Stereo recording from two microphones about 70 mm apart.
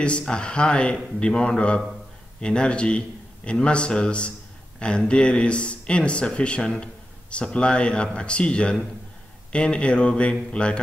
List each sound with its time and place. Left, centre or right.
0.2 s speech: centre